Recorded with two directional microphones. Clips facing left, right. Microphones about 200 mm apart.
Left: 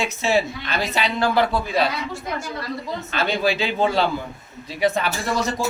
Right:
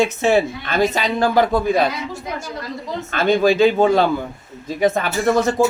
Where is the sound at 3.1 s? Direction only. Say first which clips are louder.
Right 7 dB; 50° right (ahead or behind).